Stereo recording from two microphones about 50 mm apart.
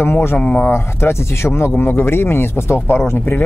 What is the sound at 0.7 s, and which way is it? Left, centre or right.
Speech, left.